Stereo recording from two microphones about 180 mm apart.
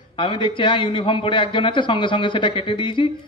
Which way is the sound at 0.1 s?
30° left (ahead or behind).